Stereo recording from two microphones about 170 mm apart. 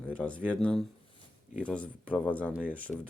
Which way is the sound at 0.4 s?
5° left (ahead or behind).